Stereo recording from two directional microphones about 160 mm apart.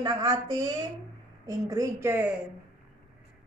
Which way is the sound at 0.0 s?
20° right (ahead or behind).